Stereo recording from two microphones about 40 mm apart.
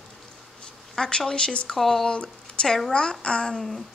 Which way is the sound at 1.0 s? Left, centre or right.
Left.